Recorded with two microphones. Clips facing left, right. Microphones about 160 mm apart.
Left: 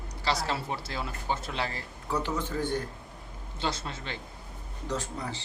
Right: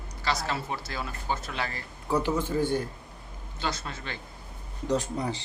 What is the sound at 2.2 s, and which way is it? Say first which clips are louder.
Speech: right 4 dB; 10° right (ahead or behind).